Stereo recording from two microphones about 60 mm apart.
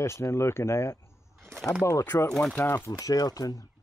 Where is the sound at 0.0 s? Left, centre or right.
Left.